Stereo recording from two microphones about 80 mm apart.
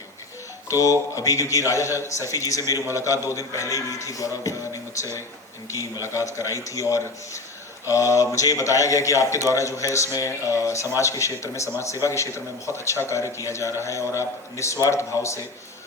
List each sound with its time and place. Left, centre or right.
0.7 s a man's voice: left